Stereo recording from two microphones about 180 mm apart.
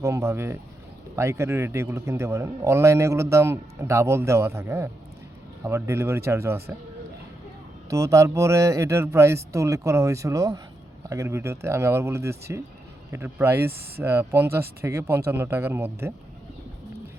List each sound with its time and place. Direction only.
0.0 s a man's voice: 15° right (ahead or behind)
7.9 s a man's voice: 20° right (ahead or behind)